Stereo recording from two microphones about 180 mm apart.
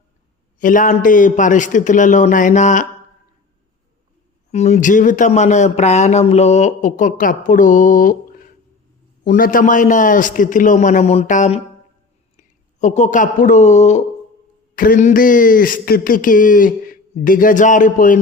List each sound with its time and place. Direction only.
0.6 s speech: 45° left (ahead or behind)
4.5 s speech: 40° left (ahead or behind)
9.2 s speech: 50° left (ahead or behind)